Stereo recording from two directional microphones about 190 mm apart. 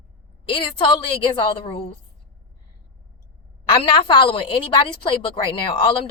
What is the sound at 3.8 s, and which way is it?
Speech, 25° left (ahead or behind).